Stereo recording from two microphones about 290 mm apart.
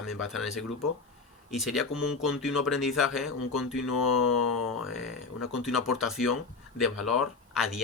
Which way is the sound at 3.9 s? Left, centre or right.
Left.